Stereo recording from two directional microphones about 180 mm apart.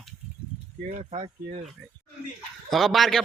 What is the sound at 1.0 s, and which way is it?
Speech, 35° right (ahead or behind).